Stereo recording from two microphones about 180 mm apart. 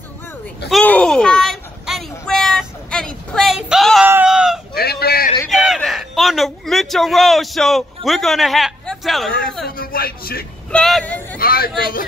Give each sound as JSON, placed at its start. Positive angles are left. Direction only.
{"t": 0.7, "sound": "a sound", "side_deg": 5}
{"t": 4.1, "sound": "sheep", "side_deg": -5}
{"t": 4.7, "sound": "a sound", "side_deg": 60}
{"t": 5.5, "sound": "a man's voice", "side_deg": 0}
{"t": 9.7, "sound": "speech", "side_deg": 55}
{"t": 10.7, "sound": "speech", "side_deg": 0}
{"t": 11.3, "sound": "speech", "side_deg": 55}